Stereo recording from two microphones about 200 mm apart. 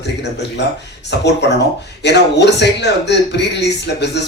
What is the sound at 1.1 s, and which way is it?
A man's voice, 60° left (ahead or behind).